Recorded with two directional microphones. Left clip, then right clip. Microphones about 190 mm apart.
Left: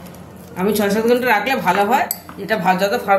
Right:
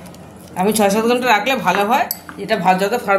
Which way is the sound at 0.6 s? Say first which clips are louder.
Right 3 dB; 40° right (ahead or behind).